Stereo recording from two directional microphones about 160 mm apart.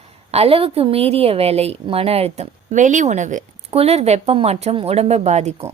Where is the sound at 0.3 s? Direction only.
40° right (ahead or behind).